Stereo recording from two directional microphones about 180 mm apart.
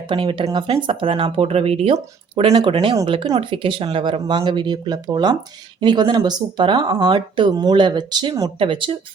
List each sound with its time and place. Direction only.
0.1 s speech: 30° right (ahead or behind)